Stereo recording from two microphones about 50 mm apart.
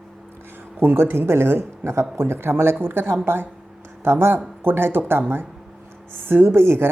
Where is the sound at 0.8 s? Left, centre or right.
Right.